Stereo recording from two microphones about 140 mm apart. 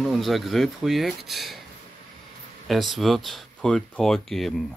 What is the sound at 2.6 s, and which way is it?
Speech, centre (ahead or behind).